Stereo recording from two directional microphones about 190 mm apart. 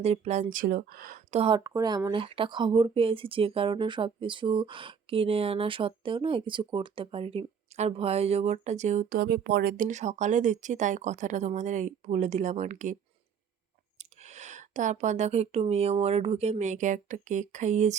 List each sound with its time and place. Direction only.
0.0 s speech: 35° right (ahead or behind); by 1.2 s 50° right (ahead or behind)
1.3 s speech: 30° right (ahead or behind)
9.1 s speech: 65° right (ahead or behind); by 13.0 s 40° right (ahead or behind)
14.0 s speech: 35° right (ahead or behind)